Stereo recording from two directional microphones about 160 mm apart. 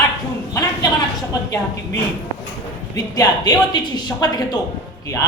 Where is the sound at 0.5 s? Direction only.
20° left (ahead or behind).